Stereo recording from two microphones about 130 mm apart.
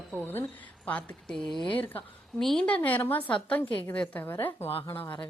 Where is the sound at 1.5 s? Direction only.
40° left (ahead or behind).